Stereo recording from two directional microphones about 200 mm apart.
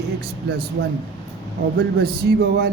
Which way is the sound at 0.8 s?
50° right (ahead or behind).